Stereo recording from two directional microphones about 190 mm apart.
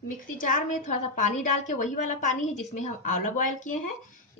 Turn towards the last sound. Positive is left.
turn(degrees=45)  # may be behind; listen again after turning